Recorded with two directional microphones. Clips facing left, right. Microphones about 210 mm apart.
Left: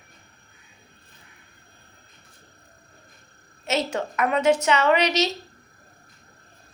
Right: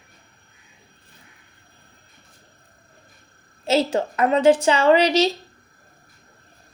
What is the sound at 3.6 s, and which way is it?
A woman's voice, 30° right (ahead or behind).